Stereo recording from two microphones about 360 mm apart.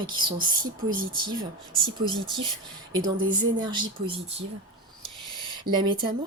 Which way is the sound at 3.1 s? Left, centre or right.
Right.